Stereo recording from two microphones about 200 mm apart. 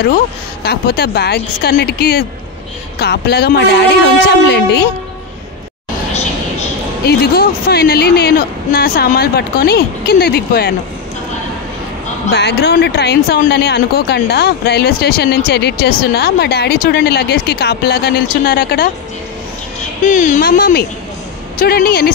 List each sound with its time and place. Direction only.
0.7 s speech: 55° left (ahead or behind)
7.1 s speech: 50° left (ahead or behind)
12.3 s speech: 55° left (ahead or behind)
20.0 s speech: 40° left (ahead or behind)